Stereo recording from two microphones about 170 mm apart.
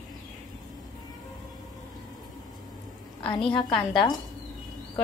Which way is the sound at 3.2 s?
30° left (ahead or behind).